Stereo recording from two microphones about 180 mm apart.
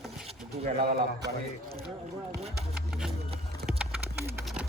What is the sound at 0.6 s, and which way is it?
Speech, 60° right (ahead or behind).